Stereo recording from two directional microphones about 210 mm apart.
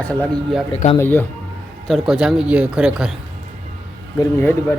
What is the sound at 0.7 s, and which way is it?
Speech, 30° left (ahead or behind).